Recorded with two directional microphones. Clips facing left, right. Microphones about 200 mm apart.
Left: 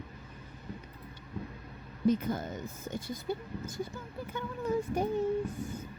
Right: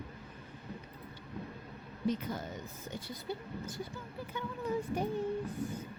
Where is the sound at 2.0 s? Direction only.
50° left (ahead or behind).